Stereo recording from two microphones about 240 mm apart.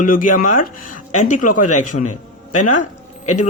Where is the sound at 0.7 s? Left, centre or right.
Left.